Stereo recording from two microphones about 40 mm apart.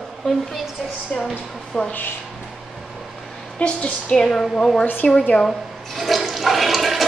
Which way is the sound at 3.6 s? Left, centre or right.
Left.